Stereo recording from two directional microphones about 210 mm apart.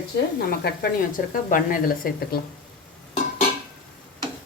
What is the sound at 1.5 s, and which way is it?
Speech, 40° left (ahead or behind).